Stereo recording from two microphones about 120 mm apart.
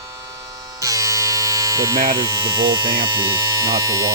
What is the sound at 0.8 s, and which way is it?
Electric shaver, 25° right (ahead or behind).